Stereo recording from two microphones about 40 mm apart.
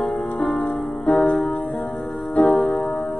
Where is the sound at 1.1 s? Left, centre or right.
Left.